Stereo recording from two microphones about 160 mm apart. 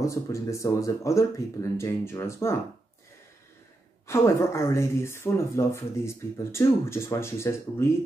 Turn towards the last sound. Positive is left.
turn(degrees=15)  # may be behind; listen again after turning